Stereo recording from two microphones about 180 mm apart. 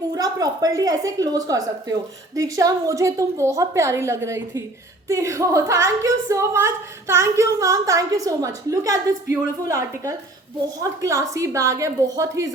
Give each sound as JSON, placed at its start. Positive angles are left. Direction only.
{"t": 0.1, "sound": "a woman's voice", "side_deg": -20}